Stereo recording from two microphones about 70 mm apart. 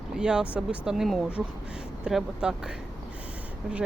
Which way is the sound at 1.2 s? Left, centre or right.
Centre.